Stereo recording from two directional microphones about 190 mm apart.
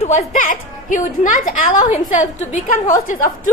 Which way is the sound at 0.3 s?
40° left (ahead or behind).